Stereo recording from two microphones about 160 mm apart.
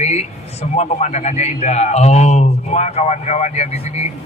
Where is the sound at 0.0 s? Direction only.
45° left (ahead or behind).